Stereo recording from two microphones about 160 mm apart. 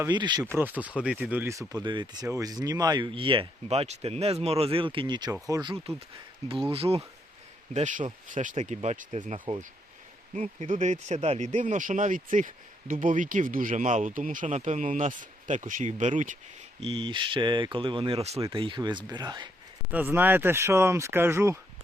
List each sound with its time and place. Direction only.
0.1 s speech: 30° right (ahead or behind)
0.4 s speech: 15° right (ahead or behind)
6.7 s speech: 35° right (ahead or behind)
7.7 s speech: 50° right (ahead or behind)
16.8 s speech: 30° right (ahead or behind)
19.9 s speech: 10° right (ahead or behind)